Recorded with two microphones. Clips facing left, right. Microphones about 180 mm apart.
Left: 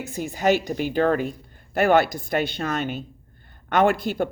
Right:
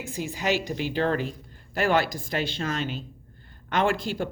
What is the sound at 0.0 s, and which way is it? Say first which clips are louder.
A woman's voice: left 6 dB; 55° left (ahead or behind).